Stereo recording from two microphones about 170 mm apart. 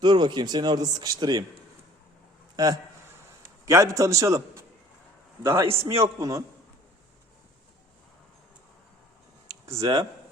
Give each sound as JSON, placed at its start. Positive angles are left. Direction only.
{"t": 0.0, "sound": "speech", "side_deg": -25}
{"t": 3.7, "sound": "a man's voice", "side_deg": -20}
{"t": 5.6, "sound": "a man's voice", "side_deg": -35}
{"t": 6.0, "sound": "speech", "side_deg": -20}
{"t": 9.6, "sound": "speech", "side_deg": -20}